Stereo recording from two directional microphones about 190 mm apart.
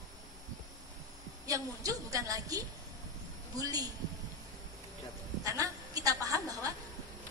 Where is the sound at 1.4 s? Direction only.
20° right (ahead or behind).